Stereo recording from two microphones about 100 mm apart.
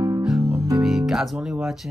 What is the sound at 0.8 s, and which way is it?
Music, 5° right (ahead or behind).